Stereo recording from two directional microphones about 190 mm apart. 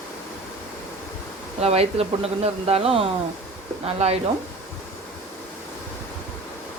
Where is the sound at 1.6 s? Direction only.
30° right (ahead or behind).